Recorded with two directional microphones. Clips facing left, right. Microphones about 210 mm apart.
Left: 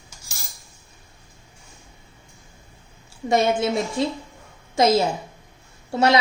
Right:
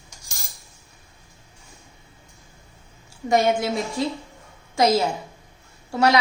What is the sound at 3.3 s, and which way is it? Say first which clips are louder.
Speech: even; 25° left (ahead or behind).